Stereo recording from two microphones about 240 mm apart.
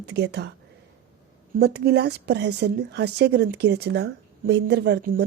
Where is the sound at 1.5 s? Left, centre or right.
Right.